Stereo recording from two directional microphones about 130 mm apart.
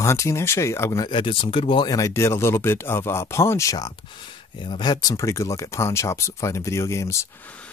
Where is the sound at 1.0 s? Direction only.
40° left (ahead or behind); by 7.3 s 20° left (ahead or behind).